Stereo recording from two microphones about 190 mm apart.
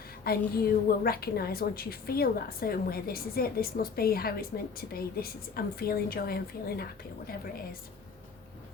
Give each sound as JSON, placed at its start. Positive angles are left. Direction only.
{"t": 0.3, "sound": "a woman's voice", "side_deg": 55}